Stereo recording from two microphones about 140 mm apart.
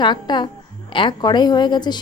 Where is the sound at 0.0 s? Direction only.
30° left (ahead or behind).